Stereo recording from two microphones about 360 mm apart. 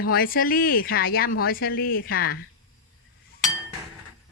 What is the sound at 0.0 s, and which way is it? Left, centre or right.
Speech, left.